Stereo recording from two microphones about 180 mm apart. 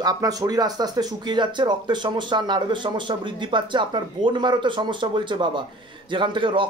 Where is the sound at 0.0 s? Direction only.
20° right (ahead or behind).